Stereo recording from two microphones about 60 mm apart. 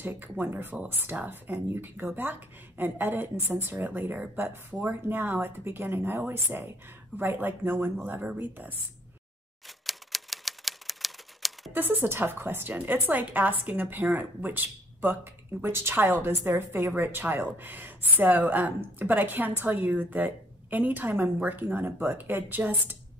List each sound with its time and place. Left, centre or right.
0.0 s a woman's voice: right
9.8 s typewriter: centre
11.7 s a woman's voice: right
15.6 s a woman's voice: right
15.9 s a woman's voice: right